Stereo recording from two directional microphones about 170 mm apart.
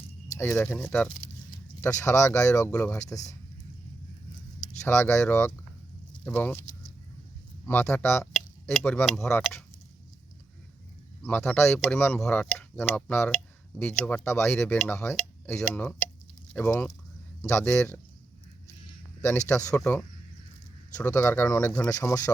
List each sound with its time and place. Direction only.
0.3 s speech: 10° left (ahead or behind)
1.8 s speech: 20° left (ahead or behind)
4.8 s speech: 15° left (ahead or behind)
7.7 s speech: 10° left (ahead or behind)
11.2 s speech: 5° left (ahead or behind)
19.5 s speech: 10° left (ahead or behind)
21.8 s speech: 20° left (ahead or behind)